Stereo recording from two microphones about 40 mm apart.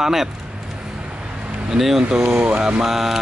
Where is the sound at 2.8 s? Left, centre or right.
Centre.